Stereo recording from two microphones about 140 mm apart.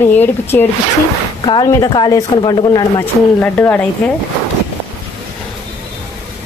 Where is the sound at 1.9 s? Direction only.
30° left (ahead or behind).